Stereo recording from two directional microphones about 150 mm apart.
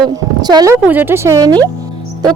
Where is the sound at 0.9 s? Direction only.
15° right (ahead or behind).